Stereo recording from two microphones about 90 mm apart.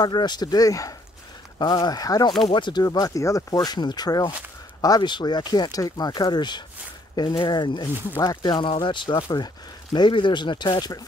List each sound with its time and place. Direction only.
0.0 s speech: 55° left (ahead or behind)
2.4 s speech: 60° left (ahead or behind)
8.2 s speech: 50° left (ahead or behind)